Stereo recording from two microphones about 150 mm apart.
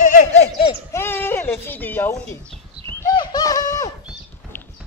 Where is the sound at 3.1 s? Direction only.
25° left (ahead or behind).